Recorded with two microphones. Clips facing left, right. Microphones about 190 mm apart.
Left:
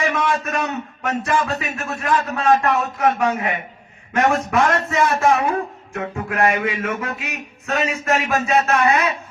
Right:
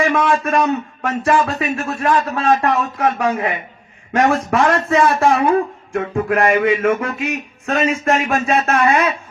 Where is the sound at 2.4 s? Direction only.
35° right (ahead or behind).